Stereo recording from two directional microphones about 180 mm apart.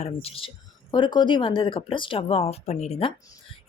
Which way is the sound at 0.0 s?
35° left (ahead or behind).